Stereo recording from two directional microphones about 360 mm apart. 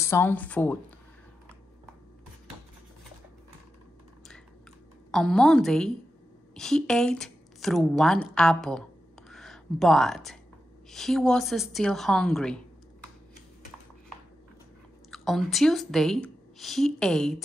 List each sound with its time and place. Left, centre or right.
0.0 s a woman's voice: centre
5.1 s a woman's voice: centre
9.3 s a sound: centre
10.9 s a woman's voice: centre
15.0 s speech: centre